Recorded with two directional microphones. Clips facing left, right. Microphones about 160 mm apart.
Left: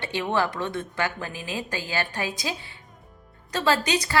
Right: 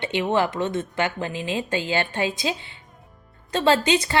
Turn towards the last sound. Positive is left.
turn(degrees=-25)  # may be behind; listen again after turning